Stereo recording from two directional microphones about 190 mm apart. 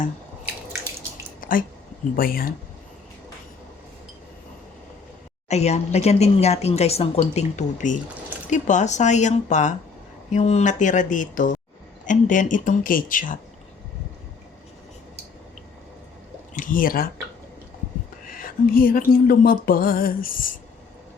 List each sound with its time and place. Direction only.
1.4 s a sound: 45° left (ahead or behind)
2.1 s speech: 50° left (ahead or behind)
5.5 s a woman's voice: 35° left (ahead or behind)
16.6 s speech: 45° left (ahead or behind)
18.3 s speech: 50° left (ahead or behind)